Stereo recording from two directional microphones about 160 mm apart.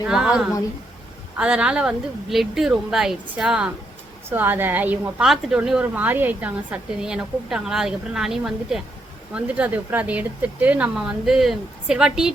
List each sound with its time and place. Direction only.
0.1 s a woman's voice: 5° right (ahead or behind)